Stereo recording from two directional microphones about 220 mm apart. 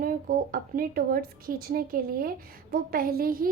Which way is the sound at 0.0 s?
40° right (ahead or behind).